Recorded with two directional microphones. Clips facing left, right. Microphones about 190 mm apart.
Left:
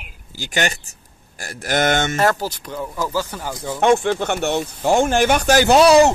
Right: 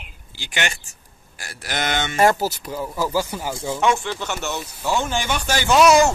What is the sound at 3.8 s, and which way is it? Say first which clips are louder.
Speech: left 6 dB; 55° left (ahead or behind).